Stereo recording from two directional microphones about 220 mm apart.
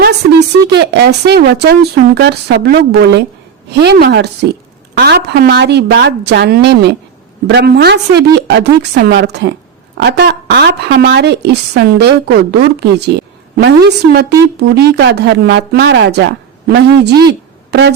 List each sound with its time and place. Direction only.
0.0 s a woman's voice: 50° right (ahead or behind)